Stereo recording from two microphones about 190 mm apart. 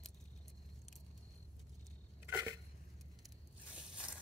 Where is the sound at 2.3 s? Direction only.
15° right (ahead or behind).